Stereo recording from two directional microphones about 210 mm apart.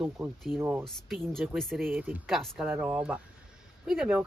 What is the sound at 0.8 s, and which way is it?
Speech, centre (ahead or behind).